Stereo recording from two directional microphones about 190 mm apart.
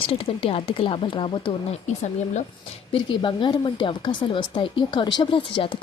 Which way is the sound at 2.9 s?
25° left (ahead or behind).